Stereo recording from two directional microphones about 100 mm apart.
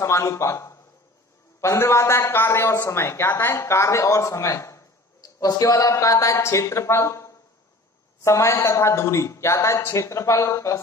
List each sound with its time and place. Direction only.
0.0 s a man's voice: 30° left (ahead or behind)